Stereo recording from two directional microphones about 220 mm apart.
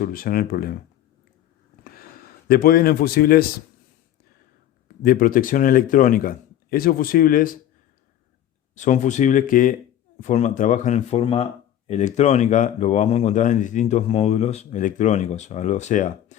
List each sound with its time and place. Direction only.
0.0 s a man's voice: 40° left (ahead or behind)
2.5 s speech: 40° left (ahead or behind)
4.9 s a man's voice: 40° left (ahead or behind)
8.7 s a man's voice: 35° left (ahead or behind)